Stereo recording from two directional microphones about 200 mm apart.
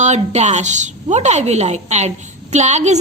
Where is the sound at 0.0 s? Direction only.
35° right (ahead or behind).